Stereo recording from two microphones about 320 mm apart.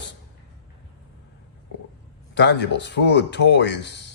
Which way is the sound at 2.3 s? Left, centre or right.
Left.